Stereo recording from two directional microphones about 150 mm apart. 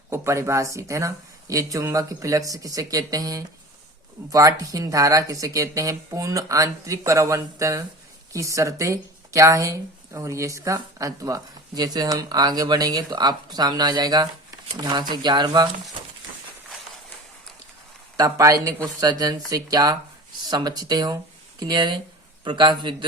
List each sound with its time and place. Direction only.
0.1 s speech: 20° right (ahead or behind)
18.2 s a man's voice: 25° right (ahead or behind)